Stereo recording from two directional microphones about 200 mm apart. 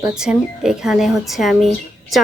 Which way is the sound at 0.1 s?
5° right (ahead or behind).